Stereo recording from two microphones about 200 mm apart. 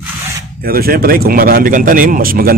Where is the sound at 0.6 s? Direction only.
50° right (ahead or behind).